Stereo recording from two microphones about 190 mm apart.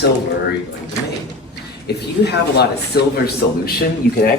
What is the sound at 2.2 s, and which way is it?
A man's voice, 60° left (ahead or behind).